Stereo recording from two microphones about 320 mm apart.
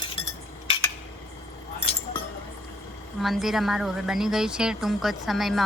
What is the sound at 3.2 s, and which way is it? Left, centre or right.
A woman's voice, centre.